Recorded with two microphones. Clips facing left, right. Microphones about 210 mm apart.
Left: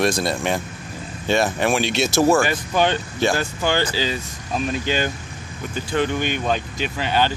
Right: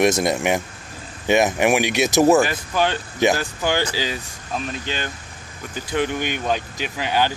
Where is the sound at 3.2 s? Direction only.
15° right (ahead or behind).